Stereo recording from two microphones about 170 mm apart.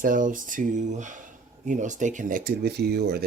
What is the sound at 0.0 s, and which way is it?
Speech, 50° right (ahead or behind).